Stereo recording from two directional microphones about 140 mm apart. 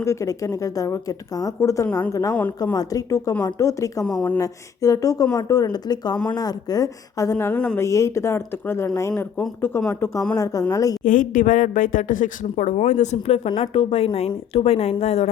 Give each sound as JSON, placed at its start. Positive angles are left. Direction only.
{"t": 0.0, "sound": "speech", "side_deg": 20}
{"t": 4.0, "sound": "speech", "side_deg": 10}
{"t": 4.4, "sound": "speech", "side_deg": 25}
{"t": 7.8, "sound": "speech", "side_deg": 20}
{"t": 11.0, "sound": "a woman's voice", "side_deg": 70}